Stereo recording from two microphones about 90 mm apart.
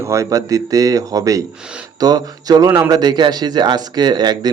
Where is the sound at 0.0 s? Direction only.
35° right (ahead or behind).